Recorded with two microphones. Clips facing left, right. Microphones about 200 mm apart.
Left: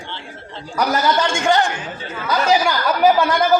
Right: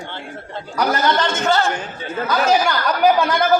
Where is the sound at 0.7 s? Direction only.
10° left (ahead or behind).